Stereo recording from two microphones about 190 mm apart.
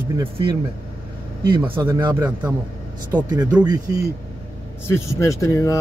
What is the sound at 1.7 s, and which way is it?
Speech, 10° right (ahead or behind).